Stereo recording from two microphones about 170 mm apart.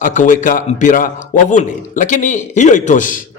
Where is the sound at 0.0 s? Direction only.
50° left (ahead or behind).